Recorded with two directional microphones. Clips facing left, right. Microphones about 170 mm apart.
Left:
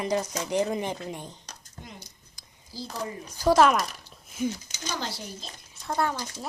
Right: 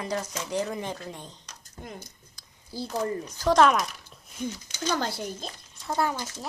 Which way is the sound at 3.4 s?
5° left (ahead or behind).